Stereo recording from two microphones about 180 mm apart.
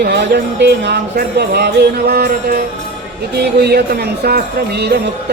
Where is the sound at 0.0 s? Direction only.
65° right (ahead or behind).